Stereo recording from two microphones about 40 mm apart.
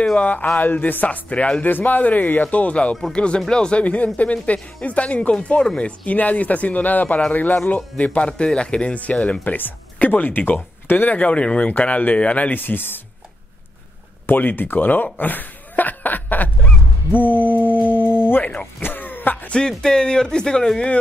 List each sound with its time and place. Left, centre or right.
0.2 s speech: left
1.6 s speech: left
3.8 s speech: left
11.1 s speech: left
12.5 s speech: left
14.2 s speech: left
15.1 s chuckle: left
17.1 s mantra: left
18.8 s throat clearing: left
19.5 s speech: centre